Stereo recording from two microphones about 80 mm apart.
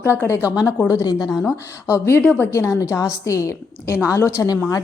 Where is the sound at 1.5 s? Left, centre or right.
Left.